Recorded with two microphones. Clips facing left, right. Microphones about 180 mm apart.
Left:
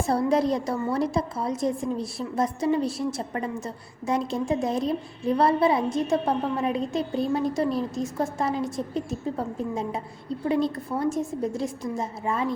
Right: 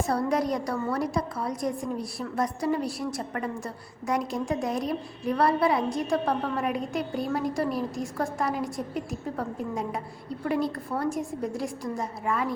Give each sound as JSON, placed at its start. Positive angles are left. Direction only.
{"t": 0.3, "sound": "a woman's voice", "side_deg": 25}